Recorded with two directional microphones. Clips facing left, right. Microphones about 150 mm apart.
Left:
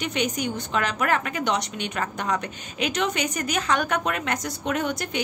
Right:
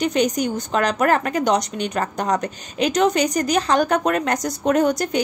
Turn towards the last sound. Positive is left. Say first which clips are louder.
# right 8 dB
turn(degrees=-40)  # may be behind; listen again after turning